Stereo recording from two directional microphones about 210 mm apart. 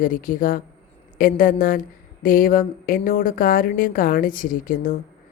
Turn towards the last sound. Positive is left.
turn(degrees=40)  # may be behind; listen again after turning